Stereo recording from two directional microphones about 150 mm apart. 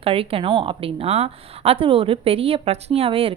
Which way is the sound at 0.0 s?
40° right (ahead or behind).